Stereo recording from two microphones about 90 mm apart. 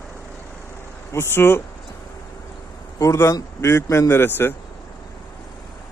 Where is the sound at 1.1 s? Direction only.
25° left (ahead or behind).